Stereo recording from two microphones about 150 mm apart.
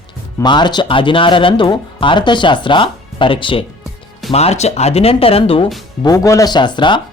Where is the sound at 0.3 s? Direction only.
30° left (ahead or behind).